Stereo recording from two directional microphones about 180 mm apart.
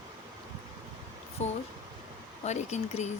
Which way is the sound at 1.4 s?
40° left (ahead or behind).